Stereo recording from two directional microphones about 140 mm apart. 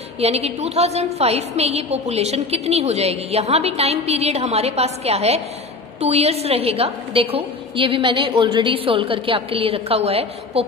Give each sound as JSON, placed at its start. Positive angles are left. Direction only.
{"t": 0.2, "sound": "a woman's voice", "side_deg": -45}